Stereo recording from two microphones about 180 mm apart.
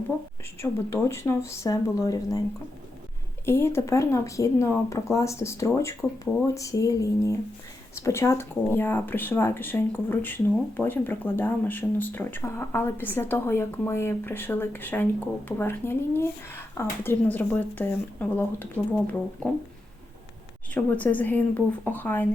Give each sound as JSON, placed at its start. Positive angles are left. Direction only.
{"t": 0.6, "sound": "speech", "side_deg": 15}
{"t": 3.4, "sound": "speech", "side_deg": 15}
{"t": 20.7, "sound": "speech", "side_deg": 10}